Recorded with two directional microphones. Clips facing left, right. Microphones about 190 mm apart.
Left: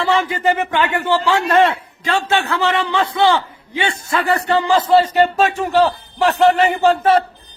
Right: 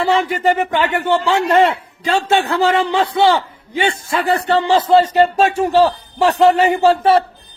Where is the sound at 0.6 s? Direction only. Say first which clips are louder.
Right 1 dB; 20° right (ahead or behind).